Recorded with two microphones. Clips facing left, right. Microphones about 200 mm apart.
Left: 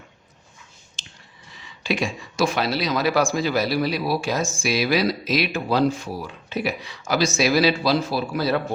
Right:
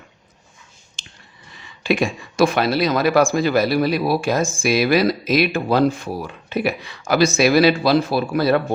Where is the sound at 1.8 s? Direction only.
55° right (ahead or behind).